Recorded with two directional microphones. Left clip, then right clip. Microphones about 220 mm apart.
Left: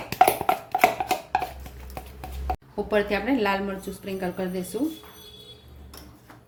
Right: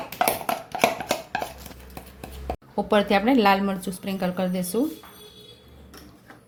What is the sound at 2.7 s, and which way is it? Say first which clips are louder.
A woman's voice: right 4 dB; 30° right (ahead or behind).